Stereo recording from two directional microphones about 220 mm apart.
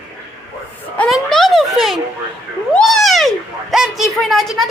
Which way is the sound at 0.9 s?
5° left (ahead or behind).